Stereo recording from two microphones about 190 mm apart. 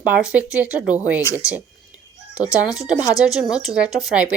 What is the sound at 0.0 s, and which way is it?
Speech, 5° right (ahead or behind).